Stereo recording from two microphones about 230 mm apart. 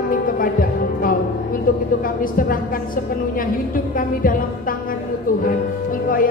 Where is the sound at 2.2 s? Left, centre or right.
Left.